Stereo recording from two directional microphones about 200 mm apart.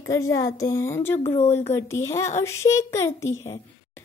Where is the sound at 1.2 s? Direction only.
30° left (ahead or behind).